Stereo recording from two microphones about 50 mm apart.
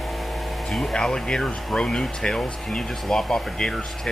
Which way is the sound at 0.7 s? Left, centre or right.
Centre.